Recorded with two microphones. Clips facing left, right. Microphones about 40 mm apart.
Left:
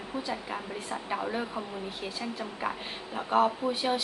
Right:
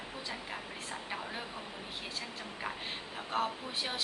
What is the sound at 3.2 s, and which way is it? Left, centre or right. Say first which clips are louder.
Speech: left 10 dB; centre.